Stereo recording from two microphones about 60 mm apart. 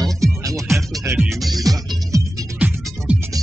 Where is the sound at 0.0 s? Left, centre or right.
Right.